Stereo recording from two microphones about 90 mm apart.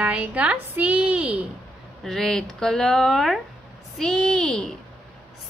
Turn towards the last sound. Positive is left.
turn(degrees=5)  # may be behind; listen again after turning